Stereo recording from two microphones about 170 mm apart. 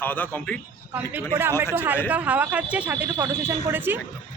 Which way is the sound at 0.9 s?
10° right (ahead or behind).